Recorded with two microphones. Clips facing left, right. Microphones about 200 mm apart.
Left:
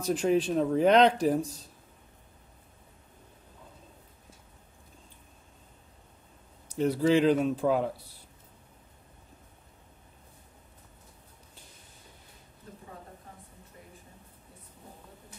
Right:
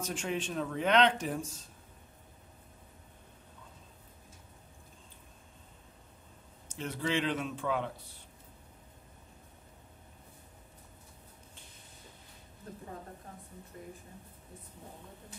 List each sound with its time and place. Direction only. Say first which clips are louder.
0.0 s speech: left 10 dB; 35° left (ahead or behind)
6.7 s speech: left 10 dB; 40° left (ahead or behind)